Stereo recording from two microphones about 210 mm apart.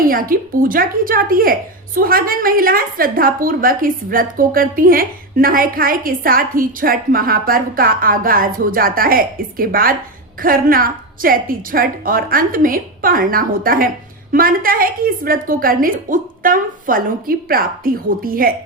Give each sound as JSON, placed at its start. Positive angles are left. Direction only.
{"t": 0.0, "sound": "a woman's voice", "side_deg": -40}